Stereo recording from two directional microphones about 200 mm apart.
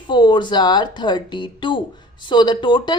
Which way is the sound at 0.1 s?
20° left (ahead or behind).